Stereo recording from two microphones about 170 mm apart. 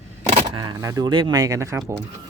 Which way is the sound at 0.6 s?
20° right (ahead or behind).